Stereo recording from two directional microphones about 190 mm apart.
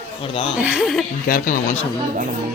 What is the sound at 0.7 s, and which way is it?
Speech, 5° right (ahead or behind).